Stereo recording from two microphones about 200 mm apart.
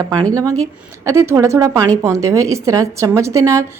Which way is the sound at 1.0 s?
15° right (ahead or behind).